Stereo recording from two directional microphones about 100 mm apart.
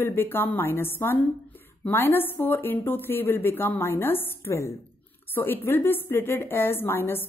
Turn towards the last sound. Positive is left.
turn(degrees=25)  # may be behind; listen again after turning